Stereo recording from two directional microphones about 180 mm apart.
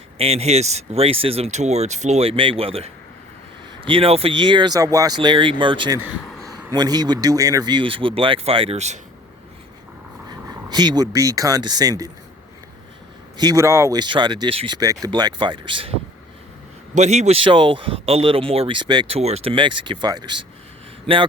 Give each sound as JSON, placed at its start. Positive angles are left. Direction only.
{"t": 0.2, "sound": "speech", "side_deg": -35}
{"t": 10.2, "sound": "speech", "side_deg": -25}
{"t": 13.3, "sound": "speech", "side_deg": -20}
{"t": 16.9, "sound": "speech", "side_deg": -40}